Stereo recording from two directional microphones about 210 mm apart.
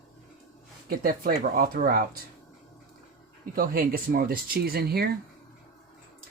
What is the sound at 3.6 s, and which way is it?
Speech, 45° right (ahead or behind).